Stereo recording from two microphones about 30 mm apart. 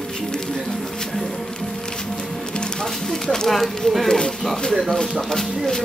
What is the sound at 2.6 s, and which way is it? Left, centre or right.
Music, left.